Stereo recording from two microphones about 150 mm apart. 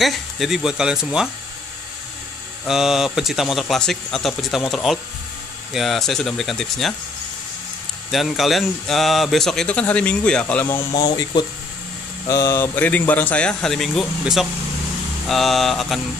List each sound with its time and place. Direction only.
0.0 s speech: centre (ahead or behind)
2.6 s speech: centre (ahead or behind)
8.1 s speech: centre (ahead or behind)
10.9 s speech: 45° left (ahead or behind)
12.3 s speech: 25° left (ahead or behind); by 16.0 s centre (ahead or behind)